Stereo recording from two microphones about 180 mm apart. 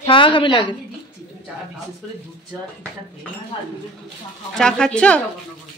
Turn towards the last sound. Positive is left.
turn(degrees=5)  # may be behind; listen again after turning